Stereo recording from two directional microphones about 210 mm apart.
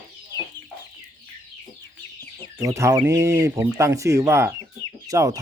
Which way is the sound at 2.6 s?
15° right (ahead or behind).